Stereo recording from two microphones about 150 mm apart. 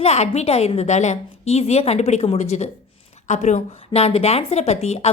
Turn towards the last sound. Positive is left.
turn(degrees=45)  # may be behind; listen again after turning